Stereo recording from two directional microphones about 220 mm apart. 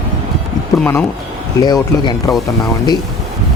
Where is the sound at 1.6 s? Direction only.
20° left (ahead or behind).